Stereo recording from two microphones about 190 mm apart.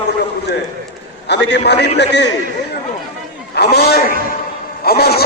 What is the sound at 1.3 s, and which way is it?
Speech, 65° left (ahead or behind).